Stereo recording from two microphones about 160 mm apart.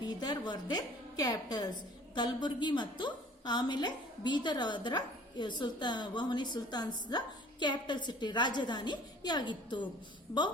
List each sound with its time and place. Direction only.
0.0 s a woman's voice: 25° left (ahead or behind)